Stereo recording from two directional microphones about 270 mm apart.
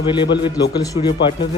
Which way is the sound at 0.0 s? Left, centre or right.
Centre.